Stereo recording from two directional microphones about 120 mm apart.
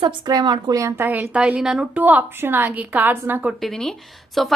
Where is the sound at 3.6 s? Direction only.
5° left (ahead or behind).